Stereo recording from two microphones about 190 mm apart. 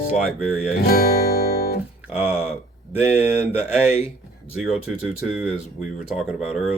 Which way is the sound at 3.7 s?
5° right (ahead or behind).